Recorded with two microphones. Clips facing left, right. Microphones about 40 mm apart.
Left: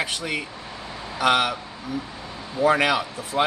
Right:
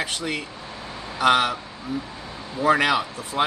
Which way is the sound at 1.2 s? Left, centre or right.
Centre.